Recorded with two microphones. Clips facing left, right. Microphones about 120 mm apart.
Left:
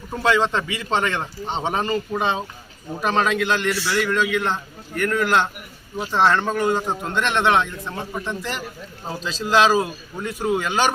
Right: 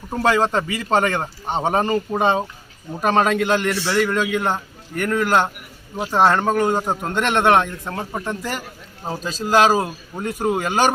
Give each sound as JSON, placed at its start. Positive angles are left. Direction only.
{"t": 0.2, "sound": "speech", "side_deg": -45}